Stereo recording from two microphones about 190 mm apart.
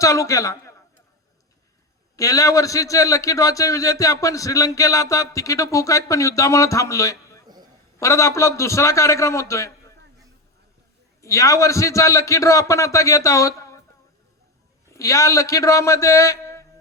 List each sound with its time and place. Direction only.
0.0 s a man's voice: 15° left (ahead or behind)
2.1 s a man's voice: 15° left (ahead or behind)
7.4 s a sound: 20° right (ahead or behind)
7.9 s a man's voice: 15° left (ahead or behind)
11.2 s a man's voice: 15° left (ahead or behind)
14.9 s a man's voice: 15° left (ahead or behind)